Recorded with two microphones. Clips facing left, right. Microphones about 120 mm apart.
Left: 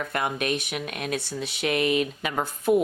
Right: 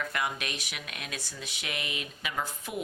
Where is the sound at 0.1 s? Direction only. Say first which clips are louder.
Left 7 dB; 45° left (ahead or behind).